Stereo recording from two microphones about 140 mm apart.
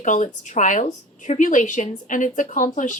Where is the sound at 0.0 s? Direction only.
65° left (ahead or behind).